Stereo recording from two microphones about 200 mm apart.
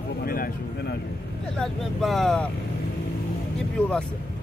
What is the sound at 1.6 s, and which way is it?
Speech, centre (ahead or behind).